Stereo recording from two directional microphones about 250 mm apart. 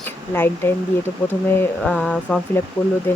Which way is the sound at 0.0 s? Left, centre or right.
Centre.